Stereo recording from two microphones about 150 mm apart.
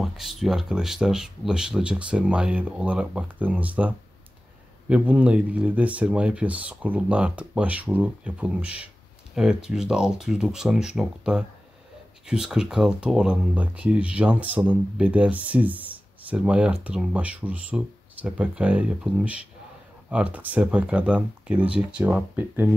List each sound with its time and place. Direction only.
0.0 s speech: centre (ahead or behind)